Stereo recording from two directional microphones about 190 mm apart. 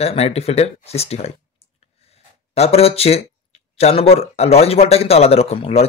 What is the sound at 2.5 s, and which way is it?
Speech, 35° left (ahead or behind).